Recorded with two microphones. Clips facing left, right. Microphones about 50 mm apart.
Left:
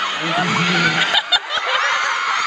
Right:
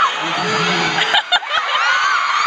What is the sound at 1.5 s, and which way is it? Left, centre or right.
Snicker, right.